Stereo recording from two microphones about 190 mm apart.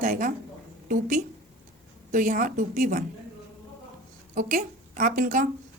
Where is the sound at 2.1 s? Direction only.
45° right (ahead or behind).